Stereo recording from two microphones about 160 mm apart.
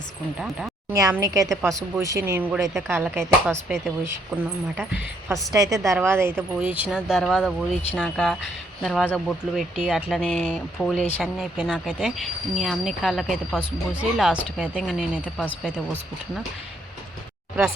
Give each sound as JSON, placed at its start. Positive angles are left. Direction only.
{"t": 0.3, "sound": "speech", "side_deg": 0}
{"t": 0.9, "sound": "speech", "side_deg": -20}
{"t": 2.6, "sound": "speech", "side_deg": 0}
{"t": 2.9, "sound": "speech", "side_deg": -15}
{"t": 5.5, "sound": "speech", "side_deg": -20}